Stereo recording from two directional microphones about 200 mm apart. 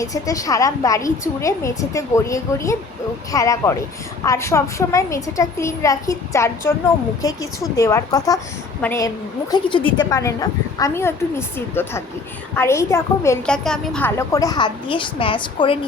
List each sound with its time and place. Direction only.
0.0 s a woman's voice: 15° left (ahead or behind)
9.5 s a woman's voice: 25° left (ahead or behind)